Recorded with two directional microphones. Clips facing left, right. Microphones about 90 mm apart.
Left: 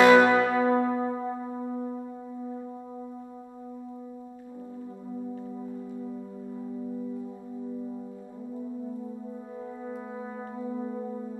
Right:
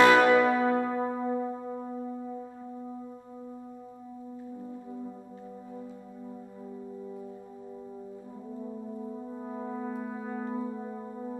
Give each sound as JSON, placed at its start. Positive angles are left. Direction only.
{"t": 0.0, "sound": "church bell", "side_deg": 20}
{"t": 0.9, "sound": "music", "side_deg": 5}
{"t": 9.6, "sound": "brass instrument", "side_deg": -20}